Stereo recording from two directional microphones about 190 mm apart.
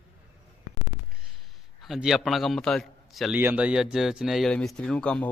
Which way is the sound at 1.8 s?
Centre (ahead or behind).